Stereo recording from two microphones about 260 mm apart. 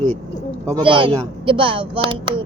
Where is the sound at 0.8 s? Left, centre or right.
Centre.